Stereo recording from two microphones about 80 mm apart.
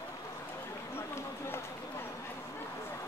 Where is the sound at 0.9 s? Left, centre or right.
Left.